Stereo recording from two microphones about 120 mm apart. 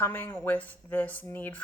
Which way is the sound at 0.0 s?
20° left (ahead or behind).